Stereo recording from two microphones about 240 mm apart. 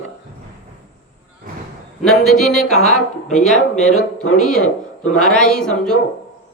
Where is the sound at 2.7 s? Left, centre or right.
Left.